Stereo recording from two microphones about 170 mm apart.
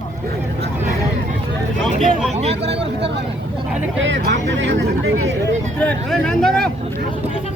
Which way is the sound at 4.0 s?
85° right.